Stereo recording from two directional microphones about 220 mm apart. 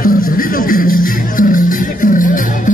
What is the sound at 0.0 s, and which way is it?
Music, 40° left (ahead or behind).